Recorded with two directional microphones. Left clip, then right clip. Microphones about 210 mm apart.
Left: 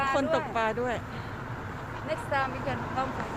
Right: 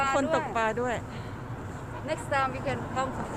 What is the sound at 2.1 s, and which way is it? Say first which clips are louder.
Speech: right 1 dB; 40° right (ahead or behind).